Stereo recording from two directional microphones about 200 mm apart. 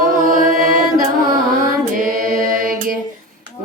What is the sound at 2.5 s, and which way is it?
Female singing, 45° right (ahead or behind).